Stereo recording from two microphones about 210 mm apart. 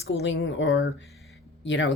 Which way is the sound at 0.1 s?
60° left (ahead or behind).